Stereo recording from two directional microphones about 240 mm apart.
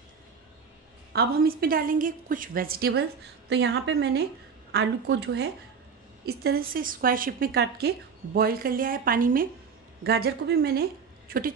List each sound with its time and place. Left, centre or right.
1.1 s a woman's voice: right